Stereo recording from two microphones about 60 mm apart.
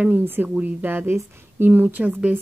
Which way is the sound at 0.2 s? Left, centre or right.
Right.